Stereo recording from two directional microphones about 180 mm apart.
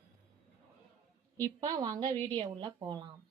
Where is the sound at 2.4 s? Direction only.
25° right (ahead or behind).